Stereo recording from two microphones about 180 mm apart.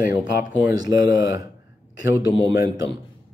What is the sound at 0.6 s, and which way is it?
Speech, 20° right (ahead or behind).